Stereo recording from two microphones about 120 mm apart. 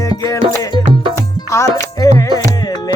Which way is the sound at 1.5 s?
25° left (ahead or behind).